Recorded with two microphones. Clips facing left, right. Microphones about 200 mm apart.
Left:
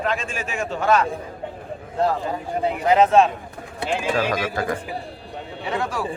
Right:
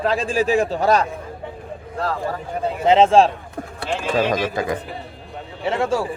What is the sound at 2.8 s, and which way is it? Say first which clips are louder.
Speech: right 3 dB; 25° right (ahead or behind).